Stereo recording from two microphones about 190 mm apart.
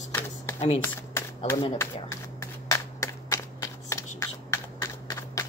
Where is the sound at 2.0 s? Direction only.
15° left (ahead or behind).